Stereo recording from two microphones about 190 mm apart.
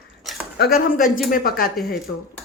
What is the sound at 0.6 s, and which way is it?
Speech, 50° left (ahead or behind).